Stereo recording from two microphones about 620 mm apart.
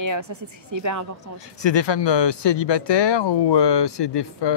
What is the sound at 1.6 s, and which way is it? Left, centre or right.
Speech, left.